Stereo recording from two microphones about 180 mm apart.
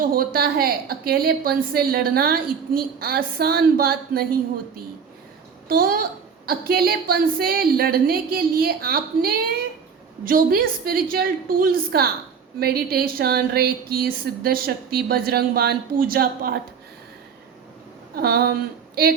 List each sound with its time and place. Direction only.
0.0 s a woman's voice: 55° right (ahead or behind)
5.6 s a woman's voice: 55° right (ahead or behind)
18.2 s a woman's voice: 60° right (ahead or behind)